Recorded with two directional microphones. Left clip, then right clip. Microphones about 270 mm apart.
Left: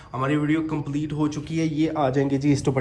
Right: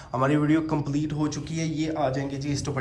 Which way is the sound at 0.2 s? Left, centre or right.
Centre.